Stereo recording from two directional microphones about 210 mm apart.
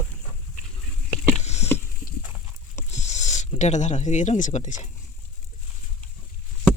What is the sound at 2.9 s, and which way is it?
Speech, 35° left (ahead or behind).